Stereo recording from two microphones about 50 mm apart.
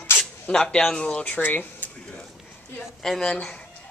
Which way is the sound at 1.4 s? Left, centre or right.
Left.